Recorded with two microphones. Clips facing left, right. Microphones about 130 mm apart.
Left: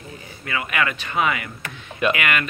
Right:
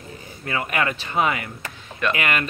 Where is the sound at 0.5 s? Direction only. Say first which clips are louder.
Even; 35° right (ahead or behind).